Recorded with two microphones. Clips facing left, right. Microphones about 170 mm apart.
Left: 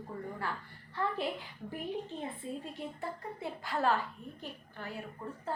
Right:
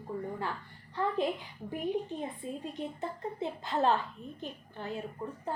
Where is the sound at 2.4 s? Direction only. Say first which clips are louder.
Right 2 dB; 20° right (ahead or behind).